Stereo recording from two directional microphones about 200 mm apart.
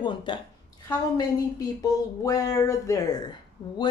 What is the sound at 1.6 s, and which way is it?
Speech, 15° left (ahead or behind).